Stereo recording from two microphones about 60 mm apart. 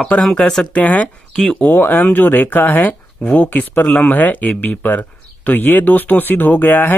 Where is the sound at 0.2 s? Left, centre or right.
Centre.